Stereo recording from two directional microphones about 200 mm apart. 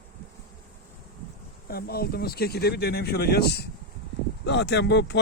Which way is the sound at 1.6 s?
50° left (ahead or behind).